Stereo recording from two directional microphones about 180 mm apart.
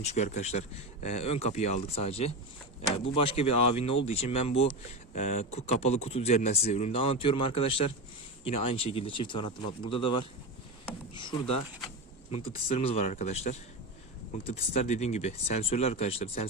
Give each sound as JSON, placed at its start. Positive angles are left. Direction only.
{"t": 0.0, "sound": "speech", "side_deg": 40}